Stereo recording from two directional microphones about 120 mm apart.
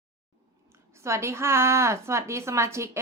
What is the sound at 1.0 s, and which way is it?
A woman's voice, 25° right (ahead or behind).